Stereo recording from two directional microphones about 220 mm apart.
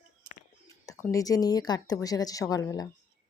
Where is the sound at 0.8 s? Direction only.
15° left (ahead or behind).